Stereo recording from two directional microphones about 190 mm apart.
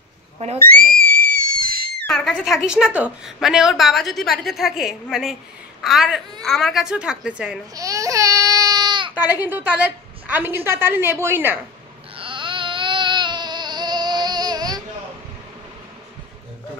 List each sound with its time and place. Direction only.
0.4 s speech: 35° right (ahead or behind)
0.7 s screaming: 45° right (ahead or behind)
2.0 s a woman's voice: centre (ahead or behind)
7.7 s baby cry: 15° right (ahead or behind)
9.1 s a woman's voice: 10° right (ahead or behind)
12.2 s baby cry: 25° right (ahead or behind)